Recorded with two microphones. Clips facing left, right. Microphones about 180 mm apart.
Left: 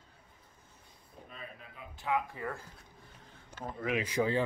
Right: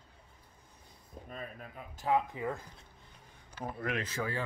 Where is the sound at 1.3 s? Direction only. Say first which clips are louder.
Right 5 dB; 45° right (ahead or behind).